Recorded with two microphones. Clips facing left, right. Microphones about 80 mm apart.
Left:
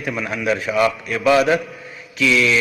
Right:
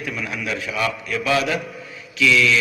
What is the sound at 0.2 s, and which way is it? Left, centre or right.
A man's voice, left.